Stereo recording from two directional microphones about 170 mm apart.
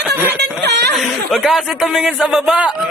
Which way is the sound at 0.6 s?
80° right.